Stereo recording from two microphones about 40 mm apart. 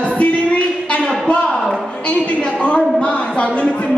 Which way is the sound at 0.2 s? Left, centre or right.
Left.